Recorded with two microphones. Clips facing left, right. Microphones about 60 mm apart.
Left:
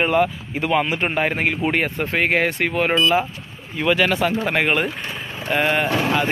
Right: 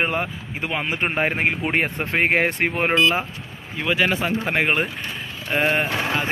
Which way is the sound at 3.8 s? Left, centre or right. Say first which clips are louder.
Left 3 dB; centre.